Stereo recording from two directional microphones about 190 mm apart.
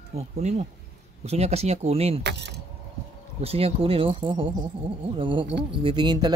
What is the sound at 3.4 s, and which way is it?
Speech, 30° right (ahead or behind).